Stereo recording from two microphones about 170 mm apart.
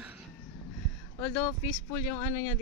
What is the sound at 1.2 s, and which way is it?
Speech, 15° left (ahead or behind).